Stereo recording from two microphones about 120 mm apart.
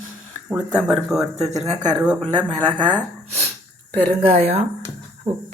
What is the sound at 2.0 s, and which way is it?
Speech, 10° right (ahead or behind).